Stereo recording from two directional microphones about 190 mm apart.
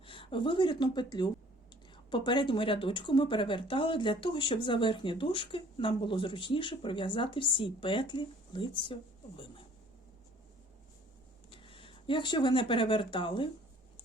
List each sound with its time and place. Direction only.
0.0 s a woman's voice: 25° left (ahead or behind)
11.5 s speech: 30° left (ahead or behind)